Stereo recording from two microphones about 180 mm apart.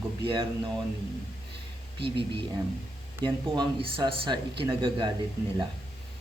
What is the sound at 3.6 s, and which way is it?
Speech, 25° right (ahead or behind).